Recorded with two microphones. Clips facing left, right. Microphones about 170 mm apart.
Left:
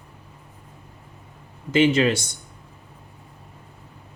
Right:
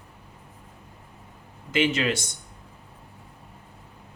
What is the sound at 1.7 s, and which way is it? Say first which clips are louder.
Speech: left 6 dB; 35° left (ahead or behind).